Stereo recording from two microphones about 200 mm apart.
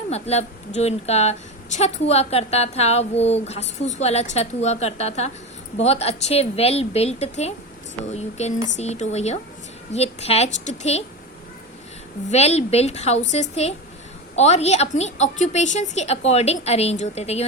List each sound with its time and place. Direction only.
0.1 s speech: 30° left (ahead or behind)
12.3 s speech: 30° left (ahead or behind)